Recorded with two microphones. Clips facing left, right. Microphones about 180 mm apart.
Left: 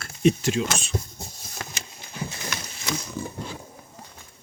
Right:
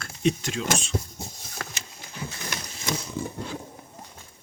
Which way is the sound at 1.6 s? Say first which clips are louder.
Even; 20° left (ahead or behind).